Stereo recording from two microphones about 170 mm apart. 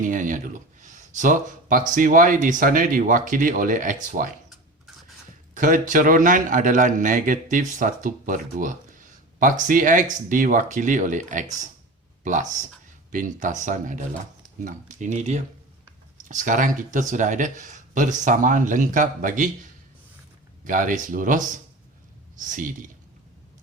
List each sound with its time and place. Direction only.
0.0 s speech: 50° right (ahead or behind)
5.5 s speech: 50° right (ahead or behind)
20.7 s speech: 50° right (ahead or behind)